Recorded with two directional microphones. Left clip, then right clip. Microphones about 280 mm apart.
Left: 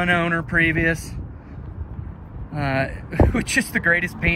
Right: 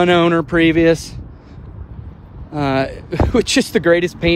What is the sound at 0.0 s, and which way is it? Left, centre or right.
Speech, right.